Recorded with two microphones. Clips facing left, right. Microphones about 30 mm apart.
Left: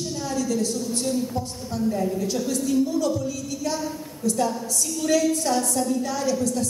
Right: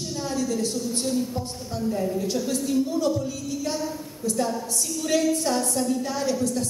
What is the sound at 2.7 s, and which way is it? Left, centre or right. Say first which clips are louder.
Speech: left 1 dB; right.